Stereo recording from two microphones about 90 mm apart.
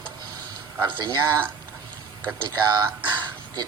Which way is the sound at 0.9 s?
55° right (ahead or behind).